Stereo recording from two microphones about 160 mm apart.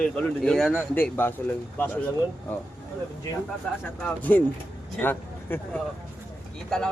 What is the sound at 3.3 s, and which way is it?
Speech, 20° left (ahead or behind).